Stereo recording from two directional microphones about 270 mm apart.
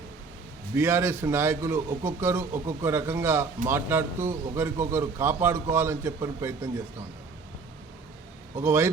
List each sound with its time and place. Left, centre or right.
0.7 s a man's voice: centre
8.5 s a man's voice: centre